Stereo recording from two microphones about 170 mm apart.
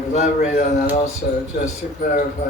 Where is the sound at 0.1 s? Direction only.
45° left (ahead or behind).